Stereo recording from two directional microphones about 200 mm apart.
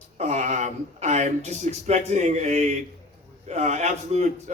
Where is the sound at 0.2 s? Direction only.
35° right (ahead or behind).